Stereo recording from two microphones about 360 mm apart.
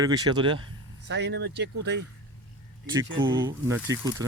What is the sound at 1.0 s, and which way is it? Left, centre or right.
Speech, right.